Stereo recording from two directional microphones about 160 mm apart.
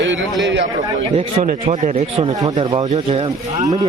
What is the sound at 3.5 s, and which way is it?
Speech, 20° right (ahead or behind).